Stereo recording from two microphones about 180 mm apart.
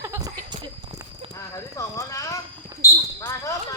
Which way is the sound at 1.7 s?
15° left (ahead or behind).